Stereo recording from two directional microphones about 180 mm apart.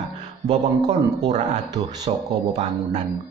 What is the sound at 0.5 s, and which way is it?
Speech, 20° right (ahead or behind).